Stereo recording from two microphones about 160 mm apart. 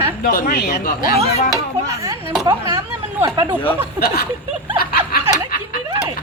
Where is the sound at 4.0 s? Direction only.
75° left (ahead or behind).